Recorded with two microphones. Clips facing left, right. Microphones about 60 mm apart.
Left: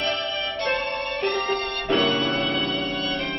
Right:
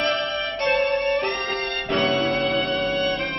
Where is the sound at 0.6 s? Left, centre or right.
Right.